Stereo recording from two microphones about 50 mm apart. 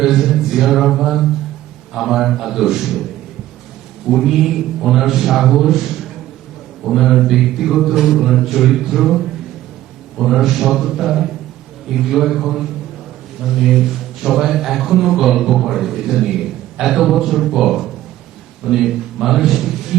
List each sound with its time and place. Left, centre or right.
0.0 s mantra: centre
1.9 s a man's voice: centre
4.1 s a man's voice: centre
19.9 s a sound: centre